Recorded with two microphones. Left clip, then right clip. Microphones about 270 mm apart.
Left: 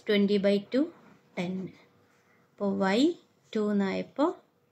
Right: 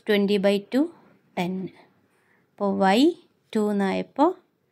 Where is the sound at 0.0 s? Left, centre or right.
Right.